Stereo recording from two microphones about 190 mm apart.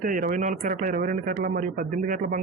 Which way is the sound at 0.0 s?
45° right (ahead or behind).